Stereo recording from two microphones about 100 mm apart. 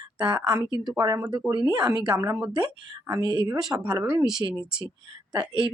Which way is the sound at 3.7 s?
40° right (ahead or behind).